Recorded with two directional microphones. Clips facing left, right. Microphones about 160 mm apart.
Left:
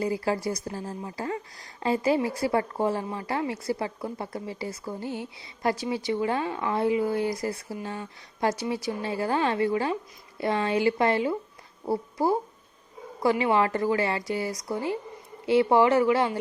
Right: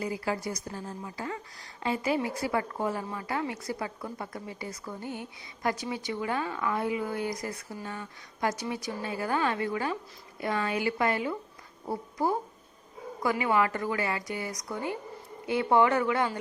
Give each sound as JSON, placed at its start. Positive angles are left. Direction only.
{"t": 0.0, "sound": "speech", "side_deg": 35}
{"t": 13.4, "sound": "speech", "side_deg": 30}